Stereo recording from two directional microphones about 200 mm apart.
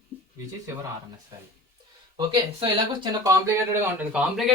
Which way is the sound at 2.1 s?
20° right (ahead or behind).